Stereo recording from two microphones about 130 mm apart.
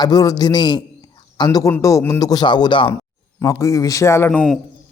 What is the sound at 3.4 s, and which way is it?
Speech, 20° left (ahead or behind).